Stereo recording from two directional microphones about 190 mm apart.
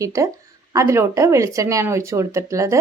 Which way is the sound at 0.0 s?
15° right (ahead or behind).